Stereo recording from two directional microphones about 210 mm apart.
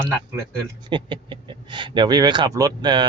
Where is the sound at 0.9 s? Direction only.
20° right (ahead or behind).